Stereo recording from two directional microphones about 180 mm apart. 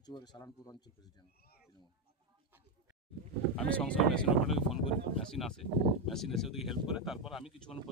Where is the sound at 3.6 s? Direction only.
5° left (ahead or behind).